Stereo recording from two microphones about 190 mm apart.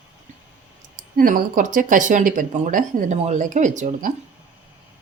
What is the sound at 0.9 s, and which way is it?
Speech, 45° right (ahead or behind).